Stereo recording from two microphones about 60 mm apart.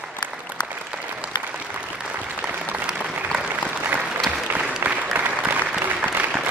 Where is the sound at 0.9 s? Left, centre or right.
Centre.